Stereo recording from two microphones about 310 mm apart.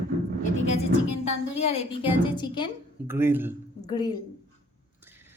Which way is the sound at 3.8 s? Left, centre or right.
Centre.